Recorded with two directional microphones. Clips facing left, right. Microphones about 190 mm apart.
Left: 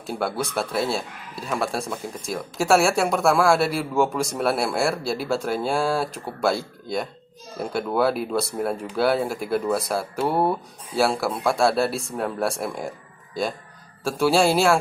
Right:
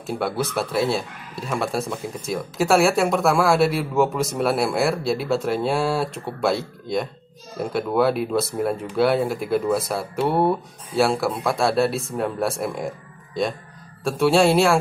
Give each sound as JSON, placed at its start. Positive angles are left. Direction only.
{"t": 0.1, "sound": "speech", "side_deg": 0}